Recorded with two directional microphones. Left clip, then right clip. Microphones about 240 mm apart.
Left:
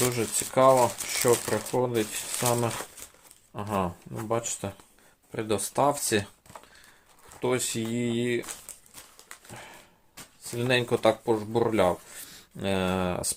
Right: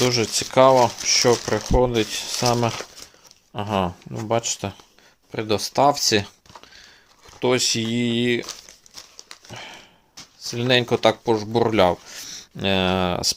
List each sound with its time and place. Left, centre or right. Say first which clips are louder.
0.0 s speech: right 7 dB; right
7.4 s speech: right 8 dB; right
9.1 s a sound: right 6 dB; right
10.5 s speech: right 6 dB; right